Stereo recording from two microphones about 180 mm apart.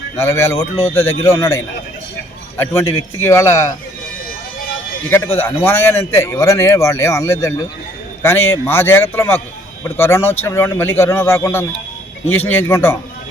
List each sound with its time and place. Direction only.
0.2 s a man's voice: 15° left (ahead or behind)
5.0 s a man's voice: 10° left (ahead or behind)